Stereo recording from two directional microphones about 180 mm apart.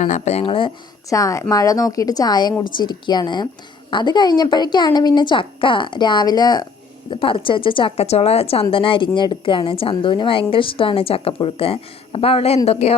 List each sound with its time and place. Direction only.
0.0 s a woman's voice: 40° left (ahead or behind)
1.1 s a woman's voice: 20° left (ahead or behind); by 12.9 s 35° left (ahead or behind)